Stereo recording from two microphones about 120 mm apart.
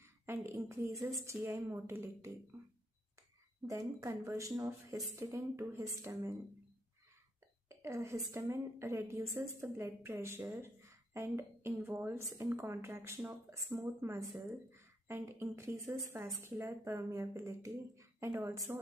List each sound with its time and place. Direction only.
0.3 s a woman's voice: 20° right (ahead or behind)
3.6 s a woman's voice: 25° right (ahead or behind)
7.8 s a woman's voice: 25° right (ahead or behind)